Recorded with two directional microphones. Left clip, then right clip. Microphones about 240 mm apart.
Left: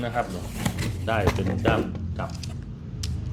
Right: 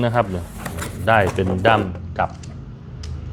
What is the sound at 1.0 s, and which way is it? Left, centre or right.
Speech, right.